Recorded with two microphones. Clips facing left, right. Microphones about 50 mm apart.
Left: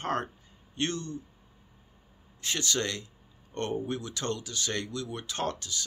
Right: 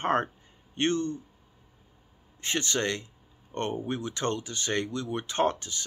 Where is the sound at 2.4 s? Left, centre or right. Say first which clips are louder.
Right 2 dB; right.